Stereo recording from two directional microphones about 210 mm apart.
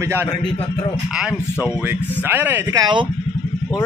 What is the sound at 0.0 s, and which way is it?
Speech, 10° right (ahead or behind).